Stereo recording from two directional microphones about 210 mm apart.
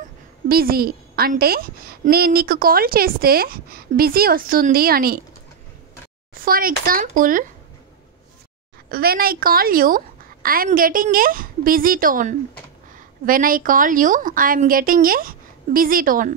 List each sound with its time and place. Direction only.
0.5 s a woman's voice: 45° right (ahead or behind)
6.3 s a woman's voice: 45° right (ahead or behind)
8.8 s a woman's voice: 45° right (ahead or behind)